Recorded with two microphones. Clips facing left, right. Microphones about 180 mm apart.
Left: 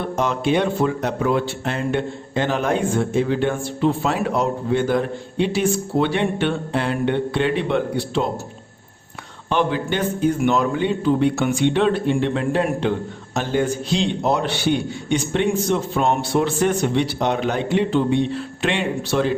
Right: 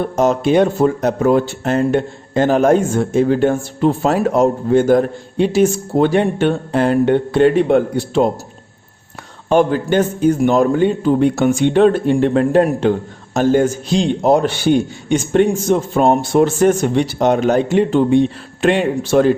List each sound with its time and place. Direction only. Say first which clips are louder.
0.0 s speech: right 6 dB; 45° right (ahead or behind)
9.5 s speech: right 7 dB; 45° right (ahead or behind)